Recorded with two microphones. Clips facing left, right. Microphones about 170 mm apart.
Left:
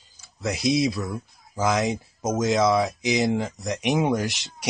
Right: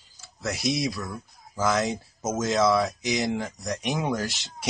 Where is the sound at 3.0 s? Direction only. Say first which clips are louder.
Left 4 dB; 20° left (ahead or behind).